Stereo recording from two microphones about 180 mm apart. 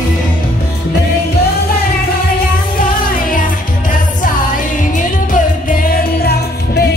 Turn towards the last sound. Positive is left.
turn(degrees=45)  # may be behind; listen again after turning